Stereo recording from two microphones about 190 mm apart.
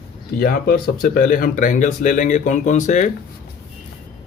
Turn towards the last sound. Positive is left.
turn(degrees=40)  # may be behind; listen again after turning